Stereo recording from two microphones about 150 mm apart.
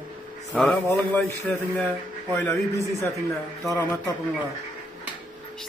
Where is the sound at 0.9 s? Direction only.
15° left (ahead or behind).